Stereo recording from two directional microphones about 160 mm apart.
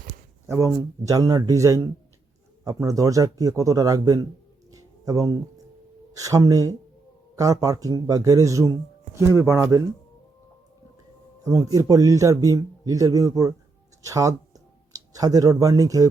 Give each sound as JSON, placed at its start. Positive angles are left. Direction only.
{"t": 0.4, "sound": "a man's voice", "side_deg": -15}
{"t": 4.7, "sound": "music", "side_deg": -20}
{"t": 6.1, "sound": "a man's voice", "side_deg": -20}
{"t": 11.4, "sound": "a man's voice", "side_deg": -20}